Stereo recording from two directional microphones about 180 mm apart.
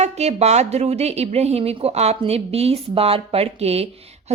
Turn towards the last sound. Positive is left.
turn(degrees=-35)  # may be behind; listen again after turning